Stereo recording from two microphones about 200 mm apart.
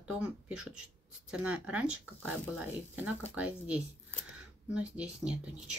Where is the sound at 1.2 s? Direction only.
5° right (ahead or behind).